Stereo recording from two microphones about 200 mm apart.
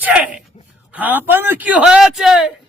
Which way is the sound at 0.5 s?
25° left (ahead or behind).